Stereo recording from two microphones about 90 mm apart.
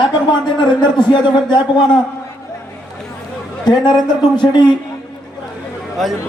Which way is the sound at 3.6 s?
50° left (ahead or behind).